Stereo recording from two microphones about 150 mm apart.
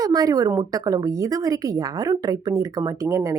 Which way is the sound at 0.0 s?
25° right (ahead or behind).